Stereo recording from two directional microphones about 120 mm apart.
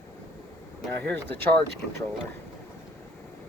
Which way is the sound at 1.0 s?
15° left (ahead or behind).